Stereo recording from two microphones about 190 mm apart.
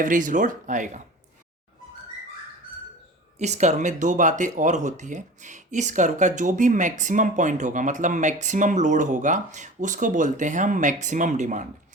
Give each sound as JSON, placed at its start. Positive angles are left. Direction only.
{"t": 0.0, "sound": "speech", "side_deg": -45}
{"t": 3.3, "sound": "speech", "side_deg": -35}